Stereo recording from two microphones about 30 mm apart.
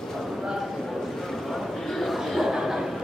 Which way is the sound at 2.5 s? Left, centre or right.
Centre.